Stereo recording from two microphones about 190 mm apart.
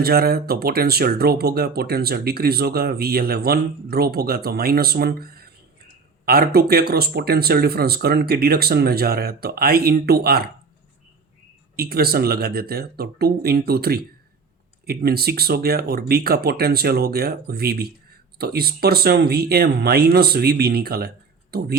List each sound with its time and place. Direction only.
0.0 s speech: 55° right (ahead or behind)
11.8 s speech: 55° right (ahead or behind)